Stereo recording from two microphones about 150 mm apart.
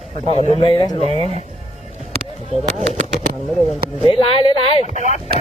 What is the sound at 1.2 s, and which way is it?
Speech, 45° right (ahead or behind).